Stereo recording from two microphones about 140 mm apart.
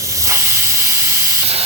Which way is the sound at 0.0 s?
20° right (ahead or behind).